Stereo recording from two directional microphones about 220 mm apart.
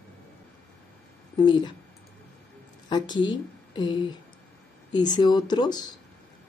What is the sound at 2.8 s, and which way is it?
A woman's voice, 20° left (ahead or behind).